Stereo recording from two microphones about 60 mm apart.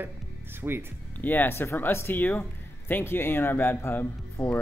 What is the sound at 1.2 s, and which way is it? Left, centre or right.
Speech, left.